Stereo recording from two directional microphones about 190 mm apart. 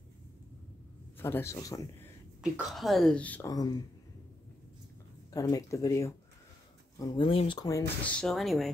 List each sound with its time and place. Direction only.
1.1 s speech: 10° left (ahead or behind)
2.4 s speech: centre (ahead or behind)
5.3 s speech: 20° left (ahead or behind)
8.0 s speech: 5° left (ahead or behind)